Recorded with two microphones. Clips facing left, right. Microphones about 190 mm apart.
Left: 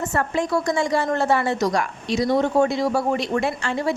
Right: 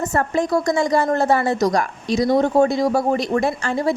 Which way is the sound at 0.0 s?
40° right (ahead or behind).